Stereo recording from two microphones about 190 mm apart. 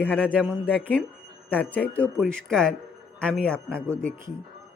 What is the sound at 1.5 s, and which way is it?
Speech, 10° left (ahead or behind).